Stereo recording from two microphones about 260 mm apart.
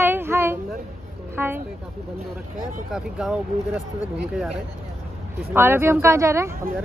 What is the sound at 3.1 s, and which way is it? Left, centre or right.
Speech, centre.